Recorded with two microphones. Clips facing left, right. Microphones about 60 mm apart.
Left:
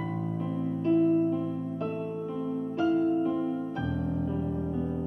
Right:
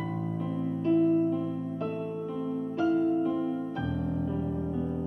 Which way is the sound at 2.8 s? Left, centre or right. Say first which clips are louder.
Even; left.